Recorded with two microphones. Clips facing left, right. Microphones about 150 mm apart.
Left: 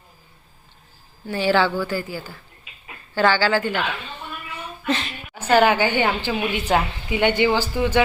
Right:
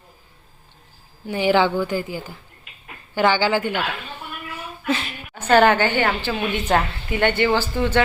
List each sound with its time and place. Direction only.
1.3 s a woman's voice: 15° right (ahead or behind)
4.6 s a sound: 5° right (ahead or behind)
5.3 s a woman's voice: 10° left (ahead or behind)